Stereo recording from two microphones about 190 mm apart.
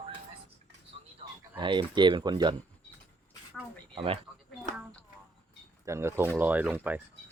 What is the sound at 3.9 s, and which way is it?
Speech, 30° right (ahead or behind).